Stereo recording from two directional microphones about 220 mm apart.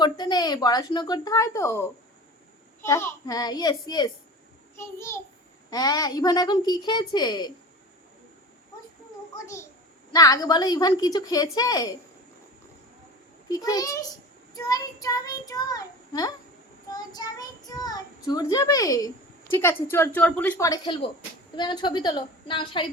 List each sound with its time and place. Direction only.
0.0 s a child's voice: 20° left (ahead or behind)
2.8 s a child's voice: 15° left (ahead or behind)
10.1 s a child's voice: 15° left (ahead or behind)
13.5 s a child's voice: 15° left (ahead or behind)